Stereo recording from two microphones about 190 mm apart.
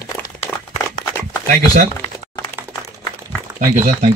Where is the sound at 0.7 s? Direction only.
20° left (ahead or behind).